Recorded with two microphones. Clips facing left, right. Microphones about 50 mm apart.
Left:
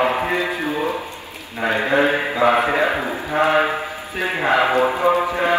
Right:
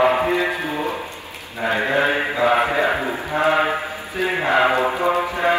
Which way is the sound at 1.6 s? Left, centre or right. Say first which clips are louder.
Left 1 dB; left.